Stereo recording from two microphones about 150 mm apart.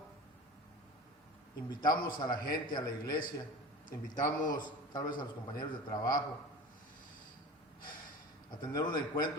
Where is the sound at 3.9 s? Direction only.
60° left (ahead or behind).